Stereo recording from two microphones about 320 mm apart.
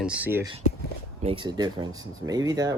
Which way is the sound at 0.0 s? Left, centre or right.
Centre.